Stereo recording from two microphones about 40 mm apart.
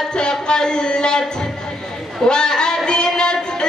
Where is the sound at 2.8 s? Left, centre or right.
Left.